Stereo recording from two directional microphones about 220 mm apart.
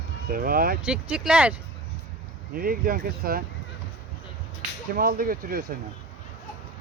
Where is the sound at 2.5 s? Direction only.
40° right (ahead or behind).